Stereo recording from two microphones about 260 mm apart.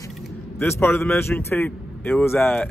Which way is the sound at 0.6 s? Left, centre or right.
Centre.